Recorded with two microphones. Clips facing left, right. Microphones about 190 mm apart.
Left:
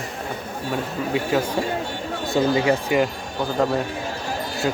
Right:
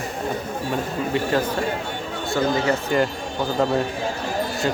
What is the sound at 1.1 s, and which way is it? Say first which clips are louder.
Speech: left 1 dB; 5° left (ahead or behind).